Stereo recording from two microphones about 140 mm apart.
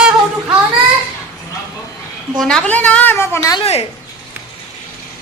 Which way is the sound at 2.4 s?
5° left (ahead or behind).